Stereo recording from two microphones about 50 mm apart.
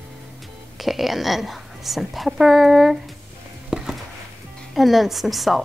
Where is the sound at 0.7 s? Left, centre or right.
Centre.